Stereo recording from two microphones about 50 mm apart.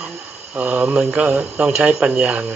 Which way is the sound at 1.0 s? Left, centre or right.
Right.